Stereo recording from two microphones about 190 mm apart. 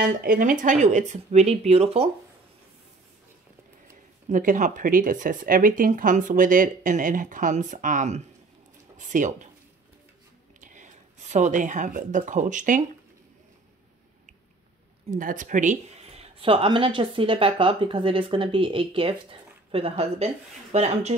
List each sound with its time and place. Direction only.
0.2 s speech: 45° right (ahead or behind)
4.3 s speech: 45° right (ahead or behind)
10.6 s speech: 40° right (ahead or behind)
15.0 s speech: 45° right (ahead or behind)